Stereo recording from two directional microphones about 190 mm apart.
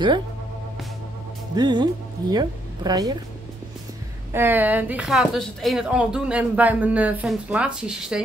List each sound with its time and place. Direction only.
1.5 s speech: 25° right (ahead or behind)
4.3 s speech: 10° right (ahead or behind)